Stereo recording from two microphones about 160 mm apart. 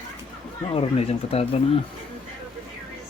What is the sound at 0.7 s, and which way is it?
Speech, 40° left (ahead or behind).